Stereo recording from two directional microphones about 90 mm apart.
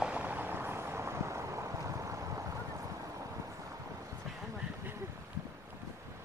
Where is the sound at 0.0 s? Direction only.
15° right (ahead or behind); by 2.4 s 35° right (ahead or behind).